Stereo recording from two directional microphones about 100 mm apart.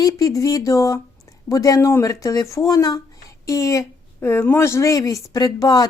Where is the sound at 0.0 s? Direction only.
35° left (ahead or behind).